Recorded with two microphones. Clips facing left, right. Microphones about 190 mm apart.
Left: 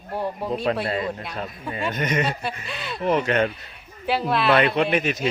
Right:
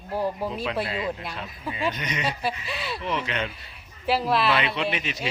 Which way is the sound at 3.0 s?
50° left (ahead or behind).